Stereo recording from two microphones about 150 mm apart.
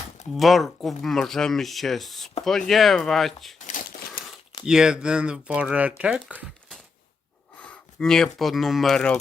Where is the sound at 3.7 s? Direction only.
65° left (ahead or behind).